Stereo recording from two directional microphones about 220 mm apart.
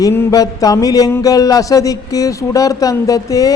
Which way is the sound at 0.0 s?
15° left (ahead or behind).